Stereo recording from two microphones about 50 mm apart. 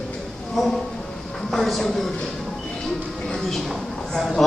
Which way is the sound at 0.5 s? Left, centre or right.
Centre.